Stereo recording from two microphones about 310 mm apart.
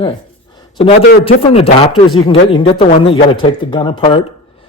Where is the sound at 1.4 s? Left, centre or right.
Centre.